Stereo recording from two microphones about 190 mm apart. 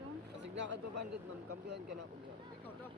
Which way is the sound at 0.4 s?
65° right (ahead or behind).